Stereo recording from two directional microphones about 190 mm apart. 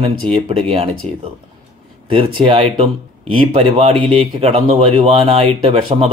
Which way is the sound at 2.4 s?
30° right (ahead or behind).